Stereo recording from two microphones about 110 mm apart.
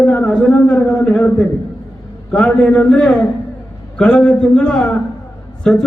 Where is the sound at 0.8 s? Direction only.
5° left (ahead or behind).